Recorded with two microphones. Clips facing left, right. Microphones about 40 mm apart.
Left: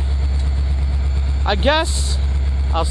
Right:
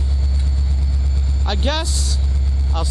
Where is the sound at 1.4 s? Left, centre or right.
Left.